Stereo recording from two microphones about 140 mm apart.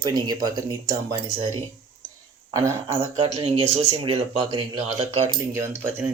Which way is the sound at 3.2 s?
50° right (ahead or behind).